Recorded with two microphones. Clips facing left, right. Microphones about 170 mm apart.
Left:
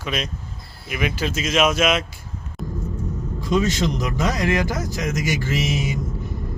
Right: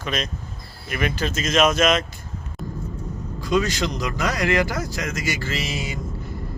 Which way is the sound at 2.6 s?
Centre (ahead or behind).